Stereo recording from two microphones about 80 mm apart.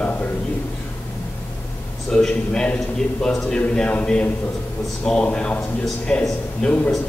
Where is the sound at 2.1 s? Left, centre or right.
Centre.